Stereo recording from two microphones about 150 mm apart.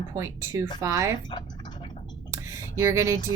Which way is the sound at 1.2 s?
30° left (ahead or behind).